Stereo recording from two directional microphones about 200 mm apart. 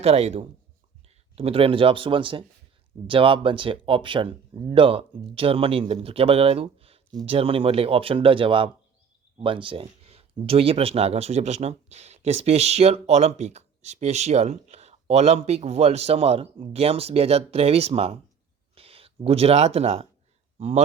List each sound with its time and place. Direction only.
0.0 s speech: 30° right (ahead or behind)